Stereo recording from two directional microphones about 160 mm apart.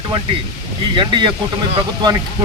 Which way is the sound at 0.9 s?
30° right (ahead or behind).